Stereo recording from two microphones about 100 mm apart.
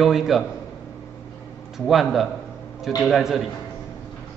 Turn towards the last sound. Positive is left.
turn(degrees=-5)  # may be behind; listen again after turning